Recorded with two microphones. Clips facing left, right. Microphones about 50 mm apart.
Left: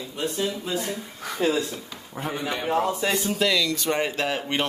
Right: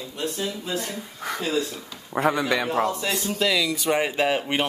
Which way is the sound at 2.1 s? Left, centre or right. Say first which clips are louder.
Right 9 dB; right.